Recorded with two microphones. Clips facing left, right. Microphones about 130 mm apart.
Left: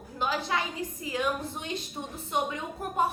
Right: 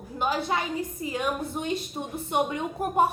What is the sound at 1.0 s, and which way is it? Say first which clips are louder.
Speech: right 4 dB; 35° right (ahead or behind).